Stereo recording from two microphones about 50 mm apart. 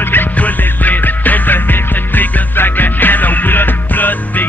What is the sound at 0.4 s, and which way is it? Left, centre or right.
Music, left.